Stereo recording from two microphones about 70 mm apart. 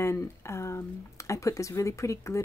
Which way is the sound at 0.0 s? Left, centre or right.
Left.